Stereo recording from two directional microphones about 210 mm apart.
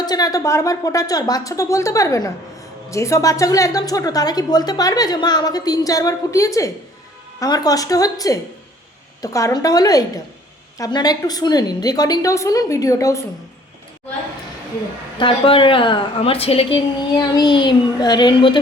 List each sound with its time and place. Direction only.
0.0 s a woman's voice: 20° left (ahead or behind)
15.2 s a woman's voice: 25° left (ahead or behind)